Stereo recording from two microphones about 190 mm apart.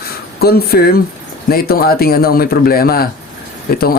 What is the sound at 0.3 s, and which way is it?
Speech, 55° left (ahead or behind).